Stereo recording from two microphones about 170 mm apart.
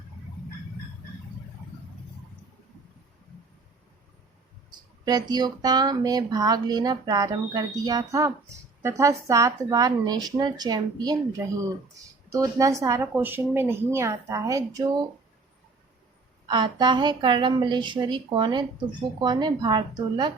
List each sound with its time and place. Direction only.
5.0 s speech: 25° right (ahead or behind)
16.5 s speech: 25° right (ahead or behind)